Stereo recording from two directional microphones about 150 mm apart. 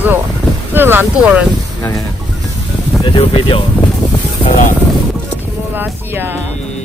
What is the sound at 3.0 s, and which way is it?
Speech, 35° left (ahead or behind).